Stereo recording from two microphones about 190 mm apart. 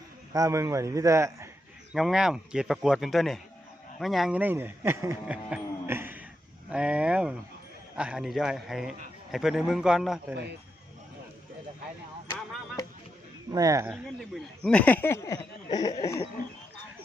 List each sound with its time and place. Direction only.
0.3 s speech: 15° right (ahead or behind)
1.9 s speech: centre (ahead or behind)
5.5 s a sound: 10° right (ahead or behind)
6.7 s speech: 5° right (ahead or behind)
13.5 s speech: 20° right (ahead or behind)
13.9 s speech: 5° left (ahead or behind); by 16.0 s 20° left (ahead or behind)